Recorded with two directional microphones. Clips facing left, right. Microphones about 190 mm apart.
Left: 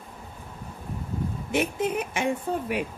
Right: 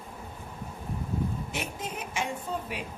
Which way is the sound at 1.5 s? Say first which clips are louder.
Left 10 dB; 60° left (ahead or behind).